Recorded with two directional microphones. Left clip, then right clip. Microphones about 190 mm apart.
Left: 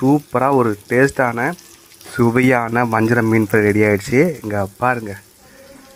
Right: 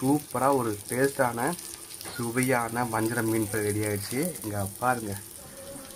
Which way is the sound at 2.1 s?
35° left (ahead or behind).